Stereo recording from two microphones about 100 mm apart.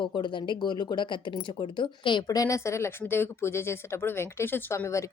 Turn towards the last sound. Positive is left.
turn(degrees=30)  # may be behind; listen again after turning